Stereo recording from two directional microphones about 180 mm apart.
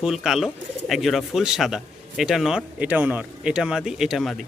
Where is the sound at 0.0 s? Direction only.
Centre (ahead or behind).